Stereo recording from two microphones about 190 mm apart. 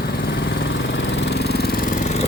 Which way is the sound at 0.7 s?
70° left (ahead or behind).